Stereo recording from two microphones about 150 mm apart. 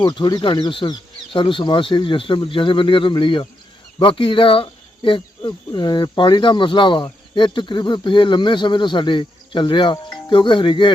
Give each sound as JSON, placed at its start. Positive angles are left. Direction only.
{"t": 0.0, "sound": "speech", "side_deg": 25}